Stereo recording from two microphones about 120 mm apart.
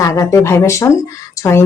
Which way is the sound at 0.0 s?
25° left (ahead or behind).